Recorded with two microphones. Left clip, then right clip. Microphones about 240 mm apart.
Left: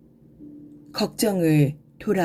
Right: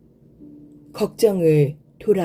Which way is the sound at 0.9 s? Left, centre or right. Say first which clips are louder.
Right 6 dB; left.